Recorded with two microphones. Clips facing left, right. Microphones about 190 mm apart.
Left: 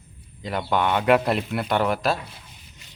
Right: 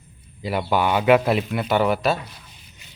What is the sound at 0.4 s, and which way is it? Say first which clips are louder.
A man's voice: right 2 dB; 5° right (ahead or behind).